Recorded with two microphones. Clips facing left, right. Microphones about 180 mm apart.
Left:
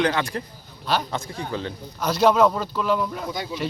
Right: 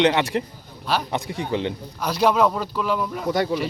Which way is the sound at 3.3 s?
65° right (ahead or behind).